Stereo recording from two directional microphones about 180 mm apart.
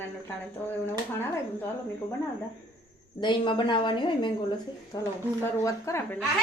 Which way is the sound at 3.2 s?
25° left (ahead or behind).